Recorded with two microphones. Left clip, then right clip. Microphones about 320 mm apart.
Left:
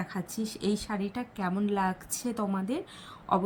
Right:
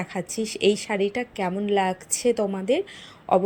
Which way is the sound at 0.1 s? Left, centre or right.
Centre.